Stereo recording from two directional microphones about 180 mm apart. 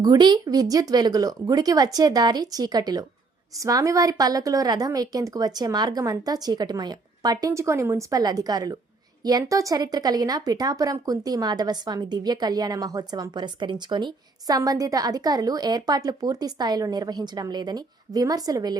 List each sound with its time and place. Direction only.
0.0 s a woman's voice: 25° right (ahead or behind)